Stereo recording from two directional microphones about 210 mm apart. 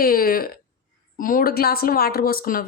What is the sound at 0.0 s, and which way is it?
A woman's voice, 45° left (ahead or behind).